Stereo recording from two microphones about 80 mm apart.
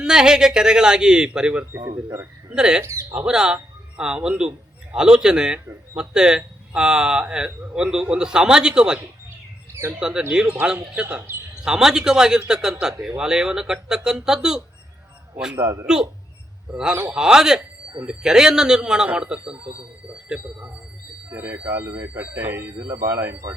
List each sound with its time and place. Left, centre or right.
0.0 s a man's voice: centre
2.8 s a man's voice: right
3.1 s a man's voice: centre
10.0 s a man's voice: centre
15.5 s a man's voice: right
16.7 s a man's voice: centre
21.2 s speech: right